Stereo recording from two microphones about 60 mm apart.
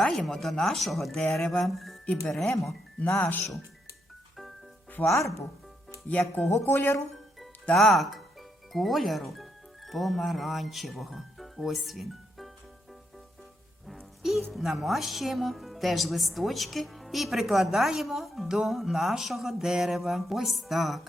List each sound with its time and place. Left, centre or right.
0.0 s speech: centre
3.2 s speech: left
5.0 s speech: left
6.1 s speech: left
6.5 s speech: left
7.8 s speech: centre
14.2 s music: centre
14.5 s speech: centre